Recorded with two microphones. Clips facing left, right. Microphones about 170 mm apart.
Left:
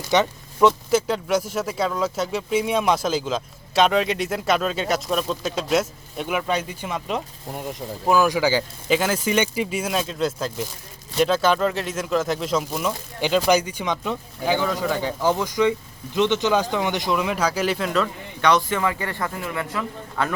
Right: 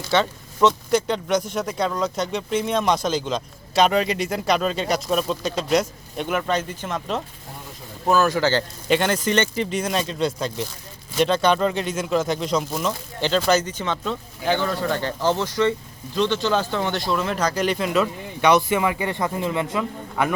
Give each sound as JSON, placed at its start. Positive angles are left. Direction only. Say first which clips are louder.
{"t": 0.1, "sound": "a sound", "louder": "left 1 dB", "side_deg": 15}
{"t": 0.7, "sound": "speech", "louder": "even", "side_deg": 5}
{"t": 16.1, "sound": "speech", "louder": "left 1 dB", "side_deg": 20}